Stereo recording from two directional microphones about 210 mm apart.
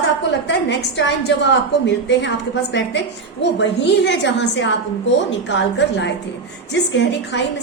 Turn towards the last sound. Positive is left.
turn(degrees=55)  # may be behind; listen again after turning